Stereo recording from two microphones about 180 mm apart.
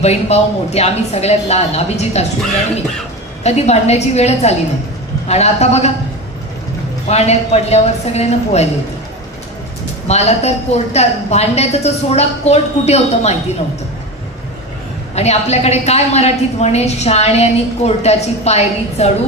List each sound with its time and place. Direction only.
0.0 s a woman's voice: 35° left (ahead or behind)
7.1 s a woman's voice: 35° left (ahead or behind)
10.0 s a woman's voice: 35° left (ahead or behind)
15.1 s a woman's voice: 35° left (ahead or behind)